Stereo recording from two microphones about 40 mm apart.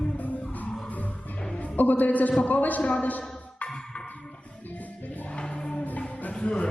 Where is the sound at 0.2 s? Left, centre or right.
Left.